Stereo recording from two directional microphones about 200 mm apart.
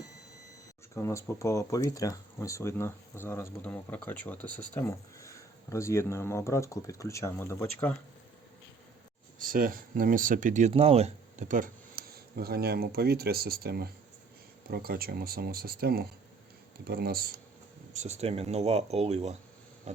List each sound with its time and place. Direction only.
0.9 s speech: 15° left (ahead or behind)
9.4 s speech: 45° right (ahead or behind)
17.9 s speech: 35° right (ahead or behind)